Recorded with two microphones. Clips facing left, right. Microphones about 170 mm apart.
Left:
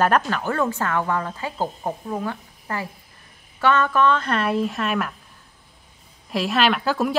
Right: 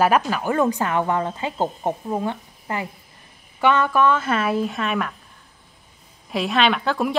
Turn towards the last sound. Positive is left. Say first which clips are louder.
# even
turn(degrees=5)  # may be behind; listen again after turning